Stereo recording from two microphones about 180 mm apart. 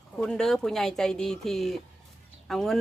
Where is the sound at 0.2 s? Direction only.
5° left (ahead or behind).